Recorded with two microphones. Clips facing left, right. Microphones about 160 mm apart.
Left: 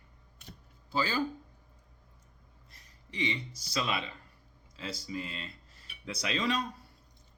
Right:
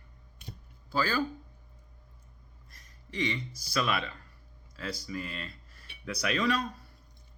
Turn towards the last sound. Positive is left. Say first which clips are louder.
# right 3 dB
turn(degrees=25)  # may be behind; listen again after turning